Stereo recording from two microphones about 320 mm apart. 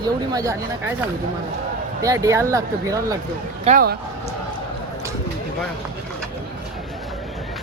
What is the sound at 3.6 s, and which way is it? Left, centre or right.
Speech, right.